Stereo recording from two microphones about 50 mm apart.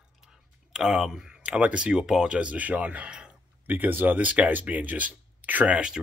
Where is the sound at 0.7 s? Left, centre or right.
Centre.